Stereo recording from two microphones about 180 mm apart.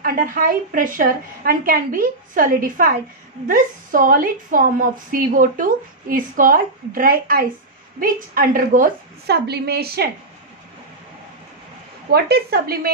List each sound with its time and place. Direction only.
0.0 s a woman's voice: 50° right (ahead or behind)
12.1 s a woman's voice: 60° right (ahead or behind)